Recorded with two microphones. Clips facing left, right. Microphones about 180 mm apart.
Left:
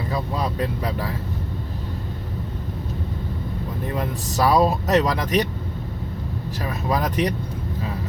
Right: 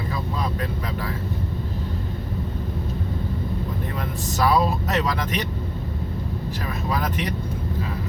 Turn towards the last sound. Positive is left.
turn(degrees=40)  # may be behind; listen again after turning